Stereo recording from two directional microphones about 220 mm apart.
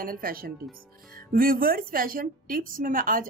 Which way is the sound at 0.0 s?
40° right (ahead or behind).